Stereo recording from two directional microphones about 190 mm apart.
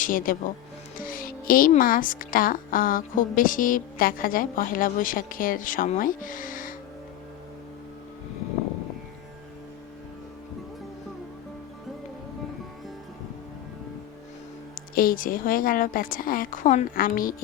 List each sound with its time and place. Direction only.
0.0 s speech: 45° left (ahead or behind)
14.8 s speech: 50° left (ahead or behind)